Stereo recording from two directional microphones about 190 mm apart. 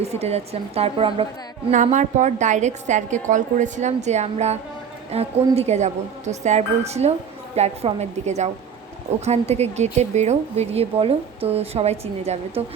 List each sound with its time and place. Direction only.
0.0 s speech: 35° right (ahead or behind)
1.7 s speech: 40° right (ahead or behind)